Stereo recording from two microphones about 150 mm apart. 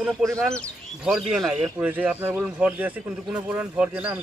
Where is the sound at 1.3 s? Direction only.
5° right (ahead or behind).